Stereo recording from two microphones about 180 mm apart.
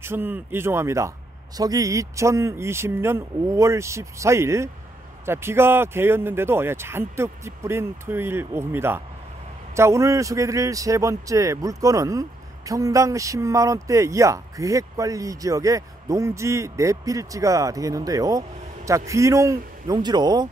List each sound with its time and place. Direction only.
0.0 s a man's voice: 10° right (ahead or behind)